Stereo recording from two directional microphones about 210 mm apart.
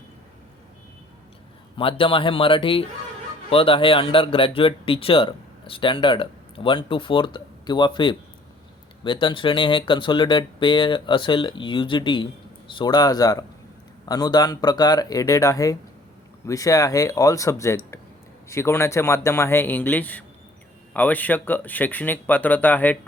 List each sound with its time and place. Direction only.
1.7 s speech: 25° left (ahead or behind); by 23.0 s 10° left (ahead or behind)